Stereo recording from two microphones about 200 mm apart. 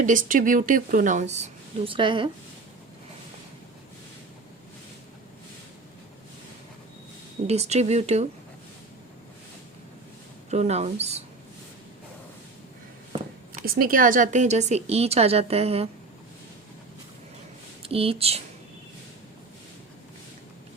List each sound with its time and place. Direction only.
0.0 s speech: 40° right (ahead or behind); by 2.3 s 25° right (ahead or behind)
7.4 s speech: 35° right (ahead or behind)
10.5 s speech: 35° right (ahead or behind)
13.5 s speech: 45° right (ahead or behind); by 15.9 s 30° right (ahead or behind)
17.8 s speech: 30° right (ahead or behind)